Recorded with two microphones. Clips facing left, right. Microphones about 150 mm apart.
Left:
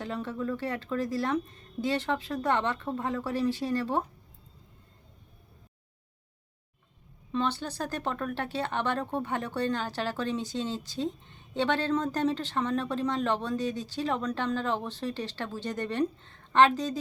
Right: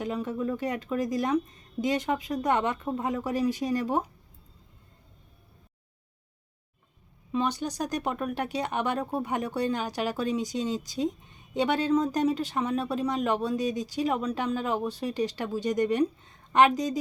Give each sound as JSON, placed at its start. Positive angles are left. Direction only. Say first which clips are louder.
{"t": 0.0, "sound": "speech", "louder": "right 3 dB", "side_deg": -15}
{"t": 7.3, "sound": "speech", "louder": "right 2 dB", "side_deg": -15}